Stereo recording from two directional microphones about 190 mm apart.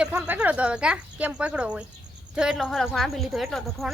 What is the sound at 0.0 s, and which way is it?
Speech, 5° right (ahead or behind).